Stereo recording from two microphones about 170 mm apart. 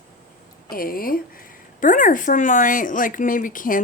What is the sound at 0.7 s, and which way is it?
A woman's voice, 60° left (ahead or behind).